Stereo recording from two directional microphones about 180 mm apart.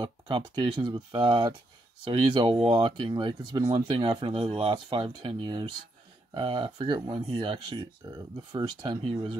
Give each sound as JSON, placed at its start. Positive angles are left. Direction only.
{"t": 0.0, "sound": "speech", "side_deg": -25}